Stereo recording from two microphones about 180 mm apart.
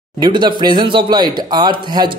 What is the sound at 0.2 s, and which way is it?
Speech, 25° right (ahead or behind).